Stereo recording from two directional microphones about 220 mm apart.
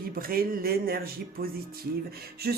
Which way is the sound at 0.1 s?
40° right (ahead or behind).